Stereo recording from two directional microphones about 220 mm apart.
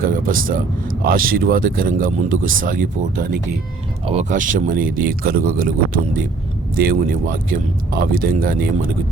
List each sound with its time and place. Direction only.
0.0 s speech: 40° right (ahead or behind)